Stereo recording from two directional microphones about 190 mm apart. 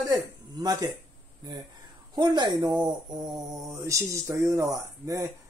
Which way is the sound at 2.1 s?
25° right (ahead or behind).